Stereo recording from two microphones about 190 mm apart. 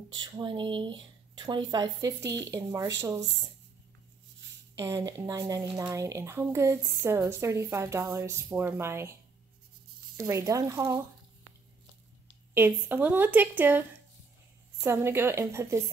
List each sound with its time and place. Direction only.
0.1 s speech: 25° right (ahead or behind)
4.7 s speech: 15° right (ahead or behind)
10.1 s speech: 15° right (ahead or behind)
12.5 s speech: 10° right (ahead or behind)